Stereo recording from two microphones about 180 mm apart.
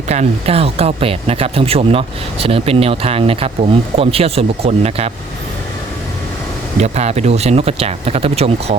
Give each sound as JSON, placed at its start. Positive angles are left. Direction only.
{"t": 0.1, "sound": "speech", "side_deg": -35}
{"t": 6.7, "sound": "speech", "side_deg": -40}